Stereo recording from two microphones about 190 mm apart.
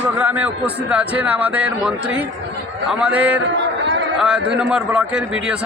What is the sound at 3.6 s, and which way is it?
Chatter, 70° right (ahead or behind).